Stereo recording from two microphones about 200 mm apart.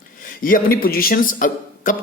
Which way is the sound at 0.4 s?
45° left (ahead or behind).